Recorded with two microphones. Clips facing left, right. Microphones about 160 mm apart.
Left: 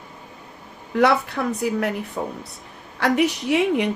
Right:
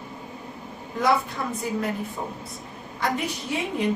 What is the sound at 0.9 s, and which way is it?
Speech, 70° left (ahead or behind).